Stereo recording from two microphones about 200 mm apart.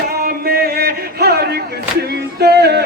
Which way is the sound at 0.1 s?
50° right (ahead or behind).